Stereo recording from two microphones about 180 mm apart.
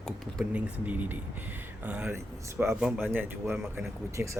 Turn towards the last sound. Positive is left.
turn(degrees=-15)  # may be behind; listen again after turning